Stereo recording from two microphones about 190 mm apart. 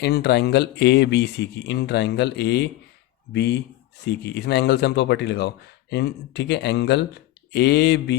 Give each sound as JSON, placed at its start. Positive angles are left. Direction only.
{"t": 0.0, "sound": "speech", "side_deg": 60}